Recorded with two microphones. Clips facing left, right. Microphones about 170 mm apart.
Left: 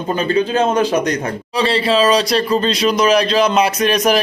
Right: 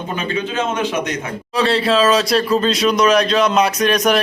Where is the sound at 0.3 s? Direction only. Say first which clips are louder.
Left 6 dB; 35° left (ahead or behind).